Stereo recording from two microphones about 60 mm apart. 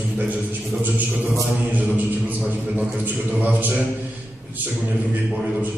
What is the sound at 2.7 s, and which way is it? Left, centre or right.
Speech, right.